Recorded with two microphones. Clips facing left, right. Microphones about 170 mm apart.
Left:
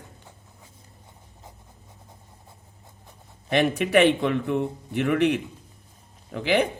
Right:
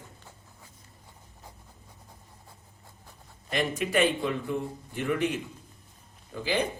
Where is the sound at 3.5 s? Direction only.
70° left (ahead or behind).